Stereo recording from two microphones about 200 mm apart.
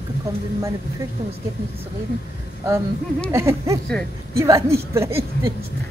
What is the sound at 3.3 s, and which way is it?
Speech, 15° right (ahead or behind).